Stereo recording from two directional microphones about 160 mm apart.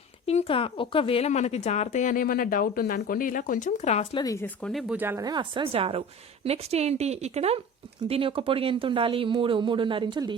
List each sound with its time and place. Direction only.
0.3 s speech: 35° left (ahead or behind)
4.2 s speech: 20° left (ahead or behind)
4.4 s speech: 5° left (ahead or behind)
4.9 s speech: 15° right (ahead or behind)